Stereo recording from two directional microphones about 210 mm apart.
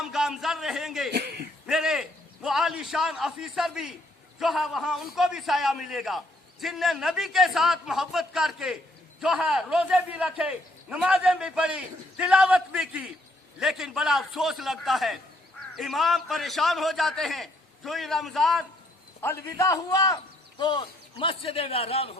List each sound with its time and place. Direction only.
0.0 s a man's voice: centre (ahead or behind)
1.1 s a sound: 50° right (ahead or behind)
1.6 s a man's voice: centre (ahead or behind)
19.2 s a man's voice: 10° left (ahead or behind); by 22.1 s 30° left (ahead or behind)